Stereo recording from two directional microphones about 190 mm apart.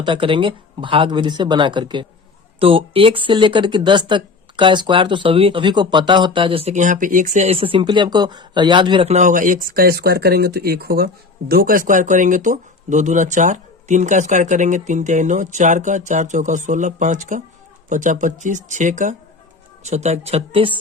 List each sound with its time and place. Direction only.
0.0 s speech: 25° right (ahead or behind)